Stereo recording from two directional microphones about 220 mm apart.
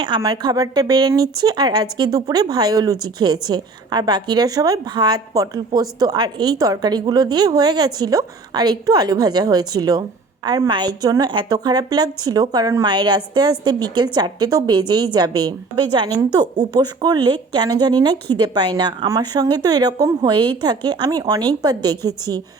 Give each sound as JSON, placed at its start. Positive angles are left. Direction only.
{"t": 0.0, "sound": "a woman's voice", "side_deg": -20}